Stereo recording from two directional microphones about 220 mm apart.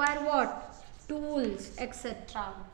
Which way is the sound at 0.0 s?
15° right (ahead or behind).